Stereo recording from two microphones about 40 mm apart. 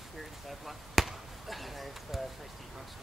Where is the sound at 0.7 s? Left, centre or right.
Centre.